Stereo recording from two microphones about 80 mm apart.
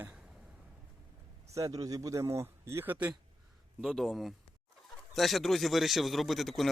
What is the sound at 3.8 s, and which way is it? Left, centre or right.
A man's voice, centre.